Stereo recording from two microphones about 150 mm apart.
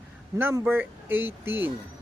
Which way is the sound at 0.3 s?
15° right (ahead or behind).